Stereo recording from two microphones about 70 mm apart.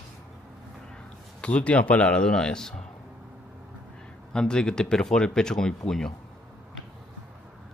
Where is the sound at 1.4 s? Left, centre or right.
Centre.